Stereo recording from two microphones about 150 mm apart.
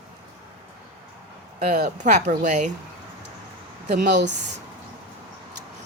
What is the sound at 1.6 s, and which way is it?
A woman's voice, 55° right (ahead or behind).